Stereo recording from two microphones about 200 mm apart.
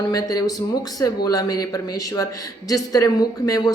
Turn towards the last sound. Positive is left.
turn(degrees=15)  # may be behind; listen again after turning